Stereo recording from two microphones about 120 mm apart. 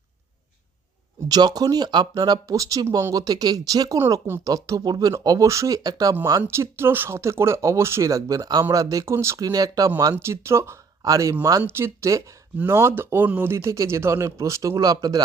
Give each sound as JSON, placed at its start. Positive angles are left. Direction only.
{"t": 1.3, "sound": "speech", "side_deg": -35}
{"t": 6.4, "sound": "speech", "side_deg": -20}